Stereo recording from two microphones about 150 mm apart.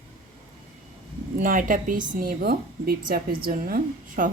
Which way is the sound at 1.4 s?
65° right (ahead or behind).